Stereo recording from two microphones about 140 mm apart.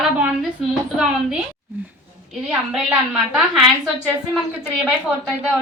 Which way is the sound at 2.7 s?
5° right (ahead or behind).